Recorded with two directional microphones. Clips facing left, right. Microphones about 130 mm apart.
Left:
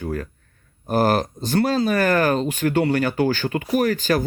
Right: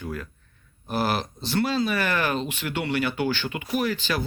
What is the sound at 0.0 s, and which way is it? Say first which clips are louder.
Speech: left 6 dB; 40° left (ahead or behind).